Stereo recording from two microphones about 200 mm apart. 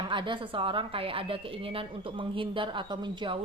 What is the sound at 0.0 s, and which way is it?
A woman's voice, 25° right (ahead or behind).